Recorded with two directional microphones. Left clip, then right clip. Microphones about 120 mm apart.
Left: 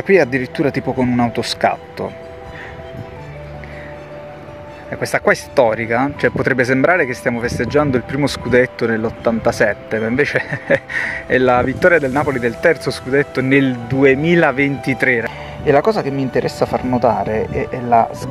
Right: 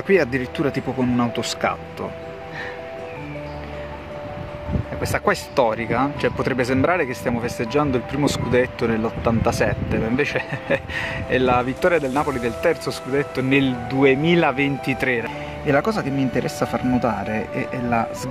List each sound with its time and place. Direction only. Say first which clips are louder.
0.0 s speech: left 5 dB; 30° left (ahead or behind)
5.0 s speech: left 6 dB; 30° left (ahead or behind)
15.6 s speech: left 7 dB; 15° left (ahead or behind)